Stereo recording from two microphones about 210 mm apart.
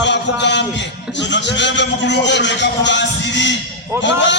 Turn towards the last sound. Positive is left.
turn(degrees=60)  # may be behind; listen again after turning